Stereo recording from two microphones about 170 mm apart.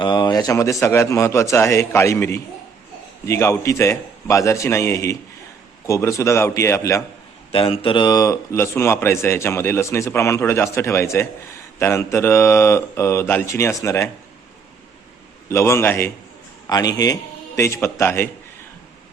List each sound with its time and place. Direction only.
0.0 s speech: 25° left (ahead or behind)
7.5 s speech: 35° left (ahead or behind); by 14.1 s 15° left (ahead or behind)
15.4 s speech: 15° left (ahead or behind)